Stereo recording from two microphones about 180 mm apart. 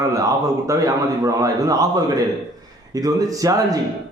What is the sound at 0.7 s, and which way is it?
A man's voice, 20° right (ahead or behind).